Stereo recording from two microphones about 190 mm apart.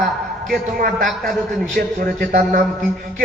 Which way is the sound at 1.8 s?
45° right (ahead or behind).